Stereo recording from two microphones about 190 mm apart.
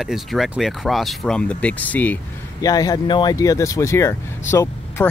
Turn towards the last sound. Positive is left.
turn(degrees=15)  # may be behind; listen again after turning